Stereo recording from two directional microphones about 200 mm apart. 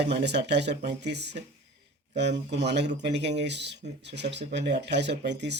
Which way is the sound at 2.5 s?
60° right (ahead or behind).